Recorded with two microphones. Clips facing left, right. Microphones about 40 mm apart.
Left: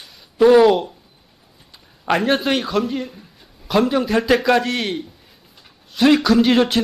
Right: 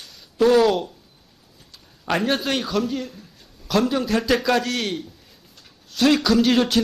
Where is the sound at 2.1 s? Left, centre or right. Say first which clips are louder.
Left 4 dB; centre.